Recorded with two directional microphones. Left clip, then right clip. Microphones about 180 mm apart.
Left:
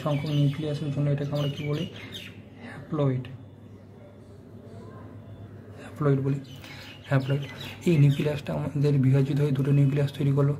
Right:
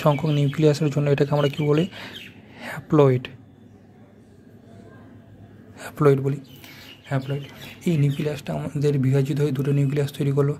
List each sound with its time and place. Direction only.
0.0 s speech: 45° right (ahead or behind)
5.9 s a man's voice: 40° right (ahead or behind)
7.1 s speech: 15° right (ahead or behind)